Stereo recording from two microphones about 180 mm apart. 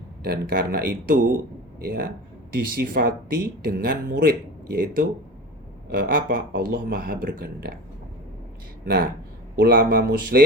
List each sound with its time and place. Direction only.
0.2 s speech: 55° right (ahead or behind)
8.8 s speech: 60° right (ahead or behind)